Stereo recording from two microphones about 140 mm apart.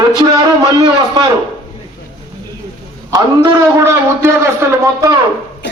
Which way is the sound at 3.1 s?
25° right (ahead or behind).